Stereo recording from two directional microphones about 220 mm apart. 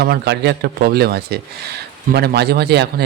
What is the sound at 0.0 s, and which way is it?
A man's voice, 50° right (ahead or behind).